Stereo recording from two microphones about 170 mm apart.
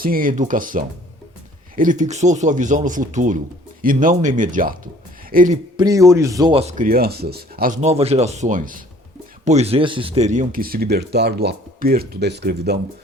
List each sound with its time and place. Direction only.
0.0 s speech: 55° right (ahead or behind)
5.7 s speech: 20° right (ahead or behind)
6.5 s speech: 40° right (ahead or behind)
6.8 s speech: 60° right (ahead or behind)
7.8 s speech: 40° right (ahead or behind)
9.4 s speech: 40° right (ahead or behind); by 12.8 s 75° right (ahead or behind)